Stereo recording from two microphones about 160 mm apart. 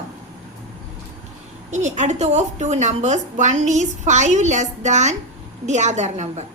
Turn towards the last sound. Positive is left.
turn(degrees=-45)  # may be behind; listen again after turning